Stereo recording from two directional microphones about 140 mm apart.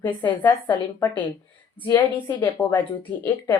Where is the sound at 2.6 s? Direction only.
Centre (ahead or behind).